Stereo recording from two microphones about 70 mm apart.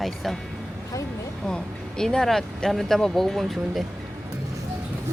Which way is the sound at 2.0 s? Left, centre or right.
Centre.